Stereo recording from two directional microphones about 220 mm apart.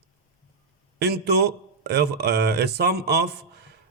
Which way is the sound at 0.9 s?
50° right (ahead or behind).